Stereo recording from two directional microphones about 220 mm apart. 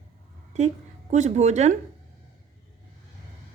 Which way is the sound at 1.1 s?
30° right (ahead or behind).